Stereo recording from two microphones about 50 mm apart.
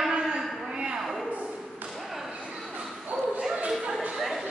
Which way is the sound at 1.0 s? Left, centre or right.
Centre.